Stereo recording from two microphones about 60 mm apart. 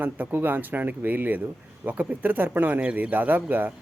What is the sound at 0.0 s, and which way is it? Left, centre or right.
A man's voice, right.